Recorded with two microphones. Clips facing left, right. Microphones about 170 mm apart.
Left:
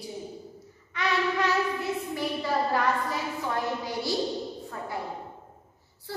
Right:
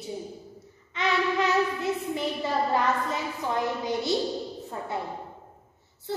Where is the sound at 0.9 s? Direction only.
20° right (ahead or behind).